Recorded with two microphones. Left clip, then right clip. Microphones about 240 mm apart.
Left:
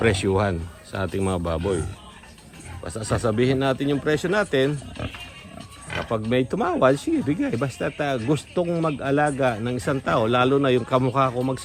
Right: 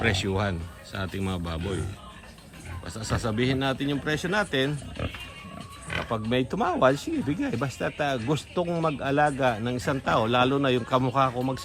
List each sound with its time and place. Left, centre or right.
0.0 s speech: centre
2.8 s a man's voice: centre
6.1 s a man's voice: centre